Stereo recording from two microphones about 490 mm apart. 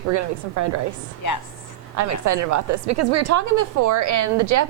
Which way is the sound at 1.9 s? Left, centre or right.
Right.